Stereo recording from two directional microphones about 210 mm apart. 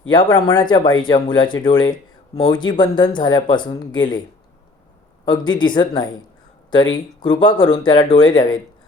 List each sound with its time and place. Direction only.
0.1 s speech: 20° left (ahead or behind)
5.2 s speech: 20° left (ahead or behind)